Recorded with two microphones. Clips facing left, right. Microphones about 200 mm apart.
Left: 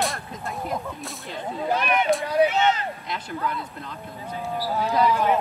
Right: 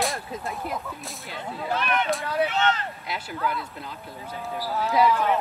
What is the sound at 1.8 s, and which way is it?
Speech, 15° left (ahead or behind).